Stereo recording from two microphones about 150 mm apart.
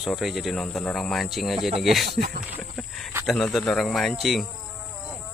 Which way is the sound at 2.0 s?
85° right.